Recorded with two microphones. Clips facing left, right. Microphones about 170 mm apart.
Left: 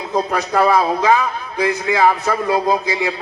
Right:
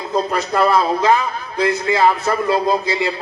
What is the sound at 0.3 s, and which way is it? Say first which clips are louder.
A man's voice: left 1 dB; 15° left (ahead or behind).